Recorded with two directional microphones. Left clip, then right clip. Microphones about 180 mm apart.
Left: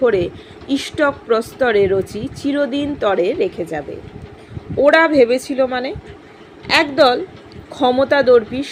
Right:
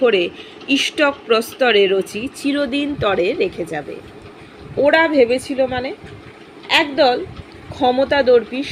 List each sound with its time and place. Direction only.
0.0 s speech: 10° left (ahead or behind)